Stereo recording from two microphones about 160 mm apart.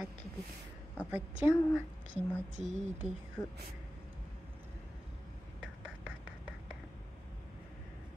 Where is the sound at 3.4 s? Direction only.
15° left (ahead or behind).